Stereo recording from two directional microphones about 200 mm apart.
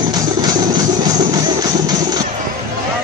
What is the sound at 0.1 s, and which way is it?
Music, 20° right (ahead or behind).